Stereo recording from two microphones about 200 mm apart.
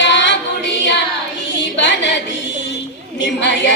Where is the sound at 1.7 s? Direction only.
65° left (ahead or behind).